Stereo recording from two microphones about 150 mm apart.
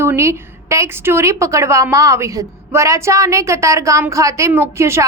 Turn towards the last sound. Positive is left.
turn(degrees=-20)  # may be behind; listen again after turning